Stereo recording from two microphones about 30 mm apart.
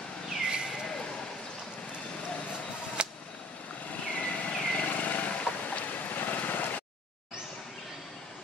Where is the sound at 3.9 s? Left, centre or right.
Left.